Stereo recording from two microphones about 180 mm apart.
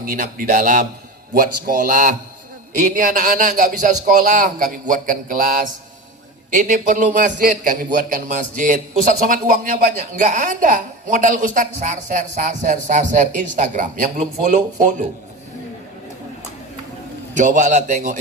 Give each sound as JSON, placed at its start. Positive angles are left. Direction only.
{"t": 0.0, "sound": "a man's voice", "side_deg": -50}
{"t": 17.3, "sound": "a man's voice", "side_deg": -45}